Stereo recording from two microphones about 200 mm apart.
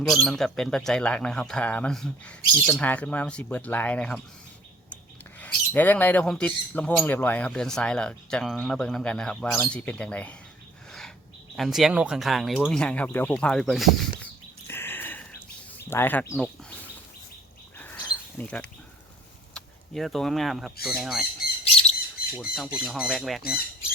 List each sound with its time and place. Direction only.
0.1 s speech: centre (ahead or behind)
5.4 s speech: 10° left (ahead or behind)
11.5 s speech: centre (ahead or behind)
14.7 s bird: 10° left (ahead or behind)
15.9 s speech: 10° left (ahead or behind)
18.0 s a sound: 5° left (ahead or behind)
19.5 s speech: centre (ahead or behind)
21.6 s bird: 30° left (ahead or behind)
22.4 s speech: centre (ahead or behind)